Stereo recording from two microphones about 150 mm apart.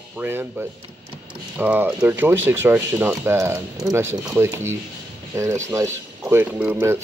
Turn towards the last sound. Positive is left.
turn(degrees=-15)  # may be behind; listen again after turning